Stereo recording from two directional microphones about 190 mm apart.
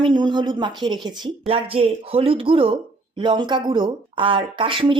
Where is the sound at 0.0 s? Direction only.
25° right (ahead or behind).